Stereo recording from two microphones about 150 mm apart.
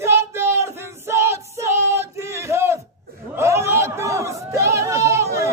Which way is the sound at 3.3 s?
20° right (ahead or behind).